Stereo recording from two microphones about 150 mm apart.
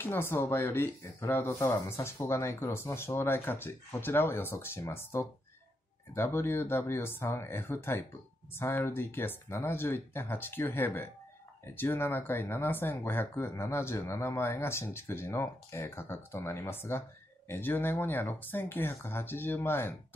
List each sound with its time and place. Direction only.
0.0 s speech: 15° left (ahead or behind)